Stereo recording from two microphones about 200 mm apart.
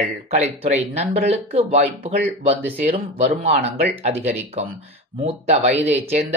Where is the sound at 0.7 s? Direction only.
35° right (ahead or behind).